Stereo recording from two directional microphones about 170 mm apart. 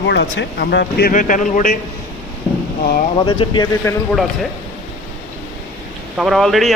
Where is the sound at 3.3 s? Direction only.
25° left (ahead or behind).